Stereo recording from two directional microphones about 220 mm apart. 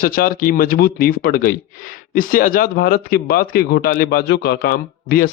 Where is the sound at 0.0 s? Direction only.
40° left (ahead or behind).